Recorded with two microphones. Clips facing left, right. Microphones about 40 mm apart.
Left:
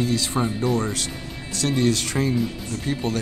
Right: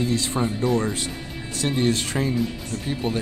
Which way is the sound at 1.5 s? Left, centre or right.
Right.